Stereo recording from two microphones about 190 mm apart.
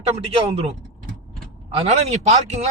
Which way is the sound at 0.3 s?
30° right (ahead or behind).